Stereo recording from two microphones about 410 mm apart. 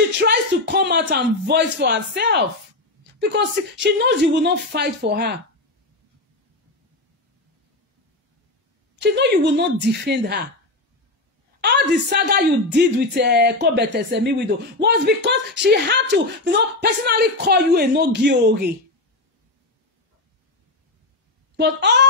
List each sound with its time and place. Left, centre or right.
0.2 s a woman's voice: right
8.9 s a woman's voice: right
11.6 s a woman's voice: right
21.5 s a woman's voice: right